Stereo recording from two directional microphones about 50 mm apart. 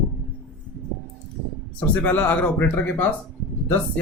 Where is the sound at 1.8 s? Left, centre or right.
Left.